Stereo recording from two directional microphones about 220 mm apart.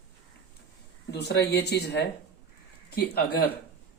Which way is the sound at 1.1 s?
50° left (ahead or behind).